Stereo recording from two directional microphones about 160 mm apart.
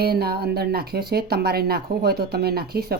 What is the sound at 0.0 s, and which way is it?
Speech, 75° right (ahead or behind).